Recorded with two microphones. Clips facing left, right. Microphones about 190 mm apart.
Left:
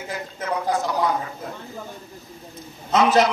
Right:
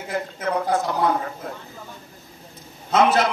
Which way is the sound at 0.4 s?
55° right (ahead or behind).